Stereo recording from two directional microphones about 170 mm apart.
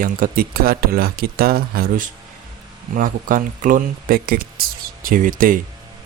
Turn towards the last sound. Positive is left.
turn(degrees=-55)  # may be behind; listen again after turning